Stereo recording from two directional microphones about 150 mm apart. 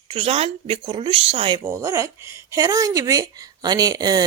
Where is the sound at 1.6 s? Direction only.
20° right (ahead or behind).